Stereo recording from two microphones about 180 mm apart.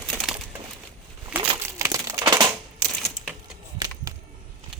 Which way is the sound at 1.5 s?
20° right (ahead or behind).